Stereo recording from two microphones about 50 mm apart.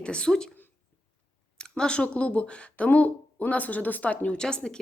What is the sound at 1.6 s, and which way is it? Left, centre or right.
Speech, centre.